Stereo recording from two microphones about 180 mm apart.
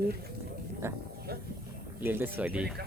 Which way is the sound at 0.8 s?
15° right (ahead or behind).